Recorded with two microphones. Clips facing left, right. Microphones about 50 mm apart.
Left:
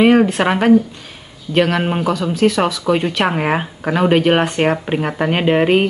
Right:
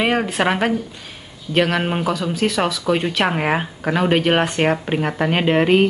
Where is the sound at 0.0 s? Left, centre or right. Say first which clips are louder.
Left 6 dB; centre.